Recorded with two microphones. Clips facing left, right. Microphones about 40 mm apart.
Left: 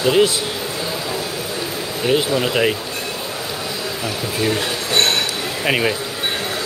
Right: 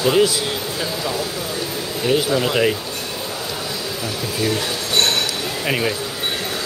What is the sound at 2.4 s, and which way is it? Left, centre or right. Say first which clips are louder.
Speech: even; centre.